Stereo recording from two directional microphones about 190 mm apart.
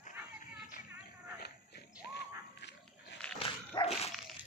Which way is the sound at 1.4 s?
60° left (ahead or behind).